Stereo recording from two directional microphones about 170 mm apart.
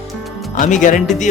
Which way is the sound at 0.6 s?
50° left (ahead or behind).